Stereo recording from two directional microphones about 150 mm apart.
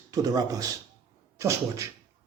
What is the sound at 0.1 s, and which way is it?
Speech, 25° right (ahead or behind).